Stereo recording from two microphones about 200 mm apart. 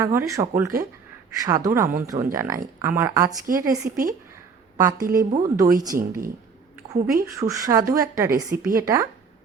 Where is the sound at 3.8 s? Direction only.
45° right (ahead or behind).